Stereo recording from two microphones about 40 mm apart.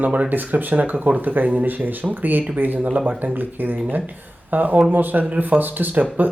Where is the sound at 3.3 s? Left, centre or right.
Right.